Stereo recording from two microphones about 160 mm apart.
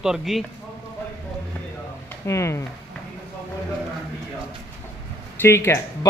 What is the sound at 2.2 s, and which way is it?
Speech, 15° left (ahead or behind).